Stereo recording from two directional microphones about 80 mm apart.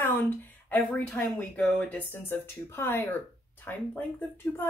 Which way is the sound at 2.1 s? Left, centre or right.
Left.